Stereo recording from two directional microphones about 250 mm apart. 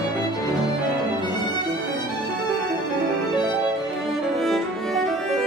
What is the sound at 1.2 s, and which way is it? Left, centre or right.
Violin, centre.